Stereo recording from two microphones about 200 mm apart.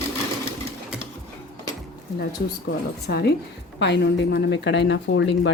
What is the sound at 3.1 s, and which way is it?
A woman's voice, 50° left (ahead or behind).